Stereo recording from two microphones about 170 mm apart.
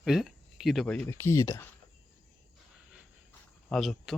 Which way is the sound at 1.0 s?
15° left (ahead or behind).